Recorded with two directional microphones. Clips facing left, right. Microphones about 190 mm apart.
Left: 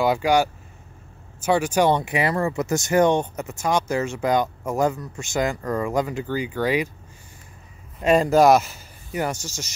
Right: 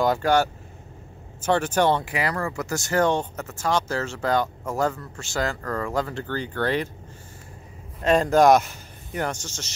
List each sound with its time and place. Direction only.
0.0 s speech: 10° left (ahead or behind)
8.0 s speech: 10° left (ahead or behind)